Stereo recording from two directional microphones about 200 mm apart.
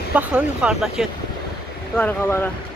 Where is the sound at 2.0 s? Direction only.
10° left (ahead or behind).